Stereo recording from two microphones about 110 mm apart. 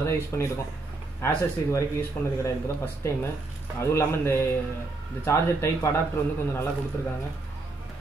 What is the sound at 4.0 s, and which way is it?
Speech, 20° left (ahead or behind).